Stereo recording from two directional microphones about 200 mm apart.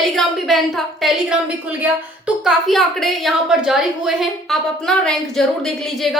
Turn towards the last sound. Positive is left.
turn(degrees=0)  # may be behind; listen again after turning